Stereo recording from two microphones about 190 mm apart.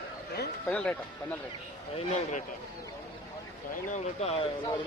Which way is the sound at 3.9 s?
35° left (ahead or behind).